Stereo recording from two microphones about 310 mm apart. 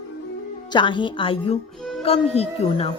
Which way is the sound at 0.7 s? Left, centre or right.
Centre.